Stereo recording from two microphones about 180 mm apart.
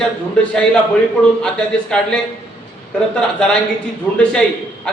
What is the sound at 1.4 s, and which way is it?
Speech, 5° left (ahead or behind).